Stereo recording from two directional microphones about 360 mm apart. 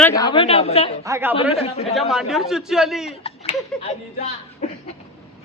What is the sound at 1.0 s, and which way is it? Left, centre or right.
Speech, centre.